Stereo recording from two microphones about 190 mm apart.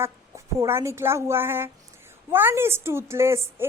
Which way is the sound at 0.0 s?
15° right (ahead or behind).